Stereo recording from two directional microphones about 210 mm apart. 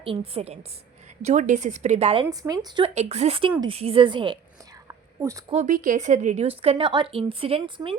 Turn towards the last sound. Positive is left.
turn(degrees=-25)  # may be behind; listen again after turning